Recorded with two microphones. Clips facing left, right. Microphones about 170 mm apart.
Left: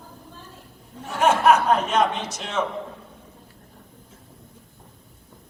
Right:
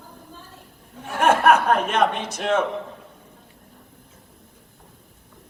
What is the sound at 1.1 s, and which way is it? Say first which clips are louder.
A man's voice: right 1 dB; 55° right (ahead or behind).